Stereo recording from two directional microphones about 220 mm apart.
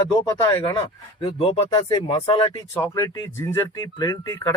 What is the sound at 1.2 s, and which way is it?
Speech, 20° left (ahead or behind).